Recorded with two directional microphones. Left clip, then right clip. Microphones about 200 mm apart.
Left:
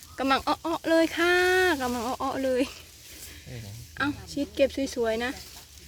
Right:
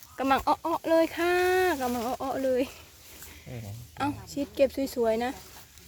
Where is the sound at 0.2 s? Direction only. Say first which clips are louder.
Even; centre (ahead or behind).